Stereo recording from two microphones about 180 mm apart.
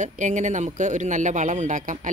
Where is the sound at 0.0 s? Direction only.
45° right (ahead or behind).